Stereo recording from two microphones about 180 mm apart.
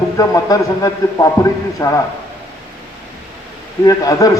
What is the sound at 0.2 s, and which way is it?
A man's voice, 20° left (ahead or behind).